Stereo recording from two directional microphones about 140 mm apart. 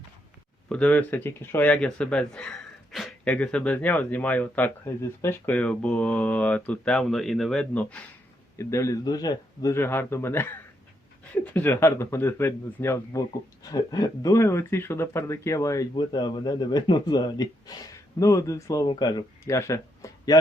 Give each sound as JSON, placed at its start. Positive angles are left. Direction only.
{"t": 0.7, "sound": "speech", "side_deg": 10}
{"t": 8.5, "sound": "speech", "side_deg": 20}